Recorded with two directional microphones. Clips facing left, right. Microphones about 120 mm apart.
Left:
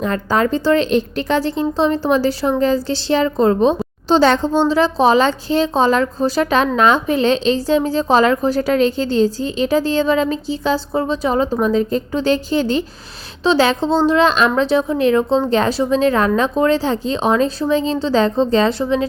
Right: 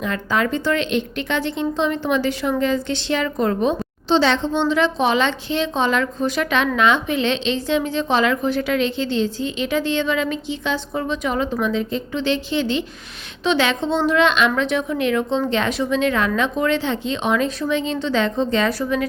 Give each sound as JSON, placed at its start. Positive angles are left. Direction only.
{"t": 0.0, "sound": "a woman's voice", "side_deg": 35}
{"t": 4.2, "sound": "a woman's voice", "side_deg": 40}